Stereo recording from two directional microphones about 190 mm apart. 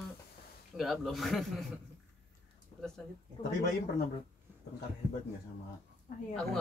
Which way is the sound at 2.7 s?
20° left (ahead or behind).